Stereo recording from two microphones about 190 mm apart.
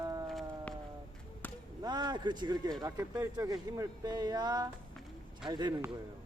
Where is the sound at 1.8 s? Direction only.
20° right (ahead or behind).